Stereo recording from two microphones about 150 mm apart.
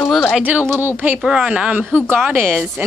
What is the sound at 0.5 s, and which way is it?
Speech, 10° right (ahead or behind).